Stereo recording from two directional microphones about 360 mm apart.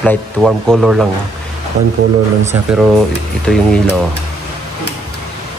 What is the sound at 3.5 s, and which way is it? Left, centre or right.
Speech, centre.